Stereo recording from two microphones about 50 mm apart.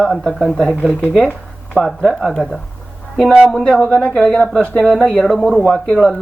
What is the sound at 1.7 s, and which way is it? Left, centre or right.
Speech, left.